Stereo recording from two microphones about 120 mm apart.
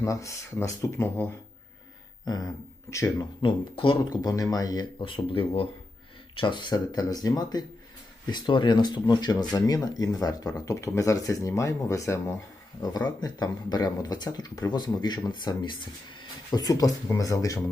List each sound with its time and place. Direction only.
0.0 s speech: 25° left (ahead or behind)
2.9 s speech: 25° left (ahead or behind)
3.4 s speech: 45° left (ahead or behind)
4.2 s speech: 30° left (ahead or behind)
13.1 s speech: 35° left (ahead or behind)
16.5 s speech: 30° left (ahead or behind)